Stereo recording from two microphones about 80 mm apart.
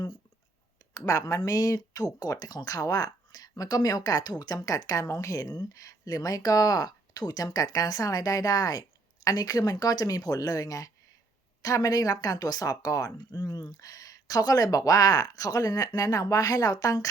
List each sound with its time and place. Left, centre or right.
0.9 s speech: left